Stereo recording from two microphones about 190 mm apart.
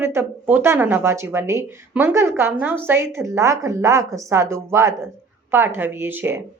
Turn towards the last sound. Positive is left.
turn(degrees=-10)  # may be behind; listen again after turning